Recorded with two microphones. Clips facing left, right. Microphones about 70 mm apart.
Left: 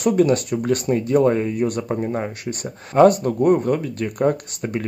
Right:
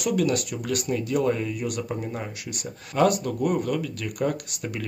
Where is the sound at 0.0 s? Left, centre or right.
Left.